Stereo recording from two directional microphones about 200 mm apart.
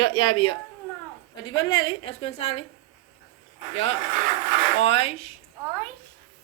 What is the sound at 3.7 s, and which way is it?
A woman's voice, 30° left (ahead or behind).